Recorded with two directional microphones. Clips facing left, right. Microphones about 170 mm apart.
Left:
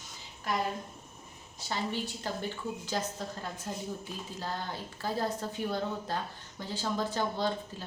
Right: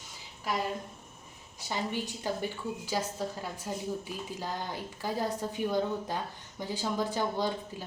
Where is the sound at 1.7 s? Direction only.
15° right (ahead or behind).